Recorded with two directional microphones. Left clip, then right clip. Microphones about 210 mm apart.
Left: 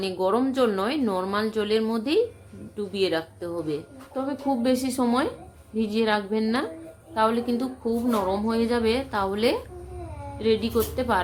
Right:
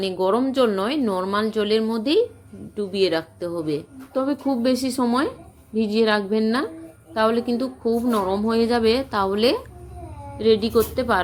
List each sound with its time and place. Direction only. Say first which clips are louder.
0.0 s a woman's voice: right 3 dB; 15° right (ahead or behind)